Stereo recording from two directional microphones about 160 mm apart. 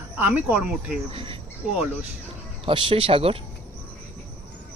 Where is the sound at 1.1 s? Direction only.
35° right (ahead or behind).